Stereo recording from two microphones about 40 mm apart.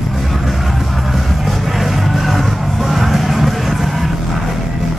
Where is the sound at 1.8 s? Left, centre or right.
Centre.